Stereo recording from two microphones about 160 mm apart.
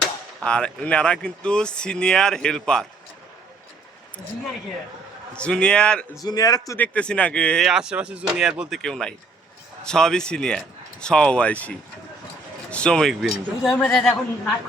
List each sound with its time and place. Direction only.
0.0 s speech: 5° left (ahead or behind)
5.3 s speech: 5° left (ahead or behind)
6.2 s speech: 25° left (ahead or behind)
6.7 s speech: 10° left (ahead or behind)
12.7 s speech: 5° left (ahead or behind)
13.9 s speech: centre (ahead or behind)